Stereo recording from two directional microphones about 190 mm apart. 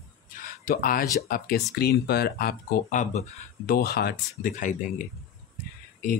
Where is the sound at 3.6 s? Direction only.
55° left (ahead or behind).